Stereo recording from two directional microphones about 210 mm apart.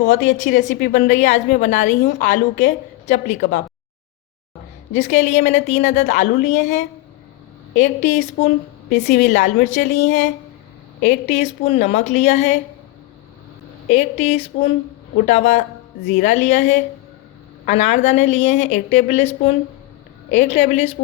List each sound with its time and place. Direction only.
0.3 s a woman's voice: 35° left (ahead or behind)
4.9 s a woman's voice: 35° left (ahead or behind)
7.7 s a woman's voice: 35° left (ahead or behind)
13.8 s a woman's voice: 35° left (ahead or behind)